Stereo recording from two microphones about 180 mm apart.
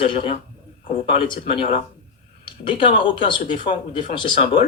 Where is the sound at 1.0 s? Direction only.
30° left (ahead or behind).